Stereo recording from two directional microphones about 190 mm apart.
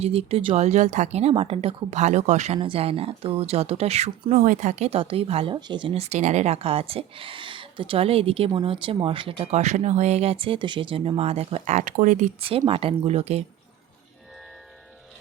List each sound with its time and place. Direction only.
0.0 s speech: 30° right (ahead or behind)